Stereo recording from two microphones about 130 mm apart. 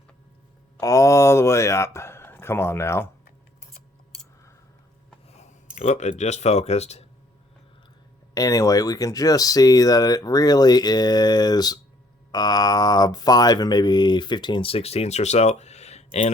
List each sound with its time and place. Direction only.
0.8 s a man's voice: 25° left (ahead or behind)
5.3 s a sound: 60° left (ahead or behind)
5.7 s speech: 60° left (ahead or behind)
8.4 s speech: 25° left (ahead or behind); by 16.3 s 60° left (ahead or behind)